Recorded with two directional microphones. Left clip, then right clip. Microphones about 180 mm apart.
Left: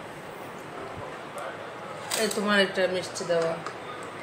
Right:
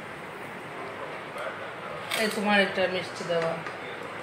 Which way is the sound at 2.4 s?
20° left (ahead or behind).